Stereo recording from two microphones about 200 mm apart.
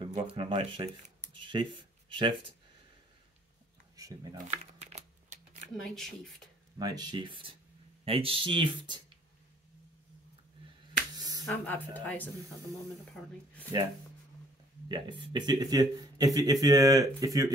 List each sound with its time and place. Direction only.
0.0 s speech: 25° right (ahead or behind)
1.0 s a sound: 35° right (ahead or behind)
1.4 s speech: 25° right (ahead or behind)
3.9 s speech: 20° right (ahead or behind)
4.5 s a sound: 35° right (ahead or behind)
5.9 s speech: centre (ahead or behind)
6.8 s speech: 20° right (ahead or behind)
11.1 s finger snapping: 20° right (ahead or behind)
11.4 s speech: 10° left (ahead or behind)
14.9 s speech: 25° right (ahead or behind)